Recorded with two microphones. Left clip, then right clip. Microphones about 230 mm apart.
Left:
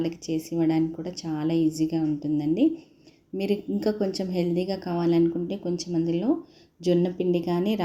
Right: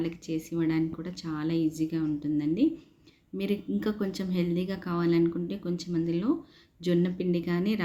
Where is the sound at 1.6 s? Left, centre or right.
Right.